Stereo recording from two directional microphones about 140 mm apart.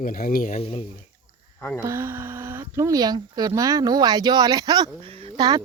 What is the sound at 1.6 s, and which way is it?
Speech, 10° left (ahead or behind).